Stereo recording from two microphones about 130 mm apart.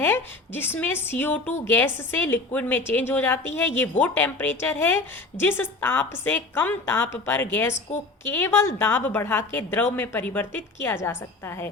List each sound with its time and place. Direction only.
0.0 s a woman's voice: 15° left (ahead or behind)